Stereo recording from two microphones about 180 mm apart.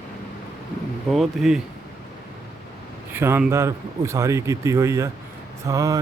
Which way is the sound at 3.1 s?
10° right (ahead or behind).